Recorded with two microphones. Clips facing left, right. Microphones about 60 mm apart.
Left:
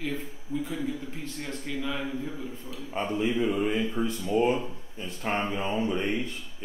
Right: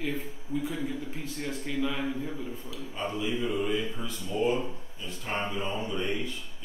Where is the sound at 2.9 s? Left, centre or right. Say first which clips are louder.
Left 4 dB; left.